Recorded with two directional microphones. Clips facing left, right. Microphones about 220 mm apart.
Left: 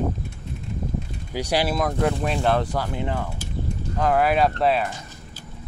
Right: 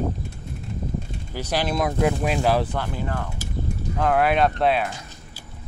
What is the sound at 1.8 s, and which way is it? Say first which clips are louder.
Speech: right 1 dB; 5° right (ahead or behind).